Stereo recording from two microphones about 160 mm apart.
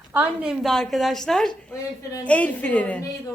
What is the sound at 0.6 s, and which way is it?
A woman's voice, 5° left (ahead or behind).